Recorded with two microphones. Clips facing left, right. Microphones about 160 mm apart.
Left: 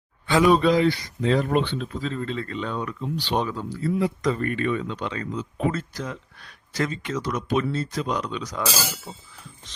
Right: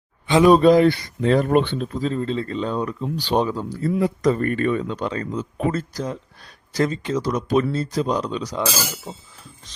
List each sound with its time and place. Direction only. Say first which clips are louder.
0.5 s speech: right 5 dB; 45° right (ahead or behind)
1.9 s speech: right 5 dB; 40° right (ahead or behind)